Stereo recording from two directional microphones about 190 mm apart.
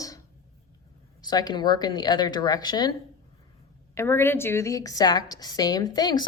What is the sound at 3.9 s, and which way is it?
A woman's voice, 10° left (ahead or behind).